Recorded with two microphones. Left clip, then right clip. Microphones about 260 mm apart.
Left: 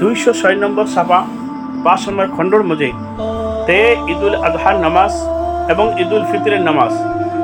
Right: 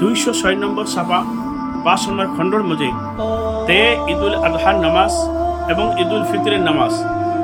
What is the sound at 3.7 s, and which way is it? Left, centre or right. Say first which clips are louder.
Speech: left 3 dB; centre.